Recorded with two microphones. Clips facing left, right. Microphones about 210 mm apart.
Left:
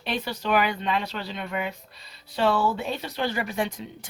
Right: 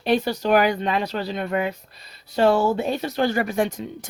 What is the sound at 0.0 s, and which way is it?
Speech, 40° right (ahead or behind).